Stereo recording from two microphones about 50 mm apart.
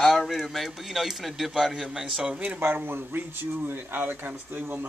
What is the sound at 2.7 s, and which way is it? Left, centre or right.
Speech, right.